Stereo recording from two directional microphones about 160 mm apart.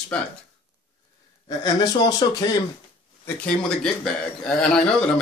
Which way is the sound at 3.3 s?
5° left (ahead or behind).